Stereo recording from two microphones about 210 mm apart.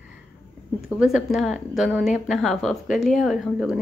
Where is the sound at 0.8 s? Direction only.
5° right (ahead or behind).